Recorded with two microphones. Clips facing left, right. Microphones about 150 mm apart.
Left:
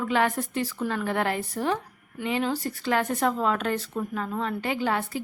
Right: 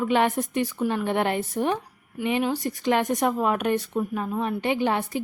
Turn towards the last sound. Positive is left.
turn(degrees=-20)  # may be behind; listen again after turning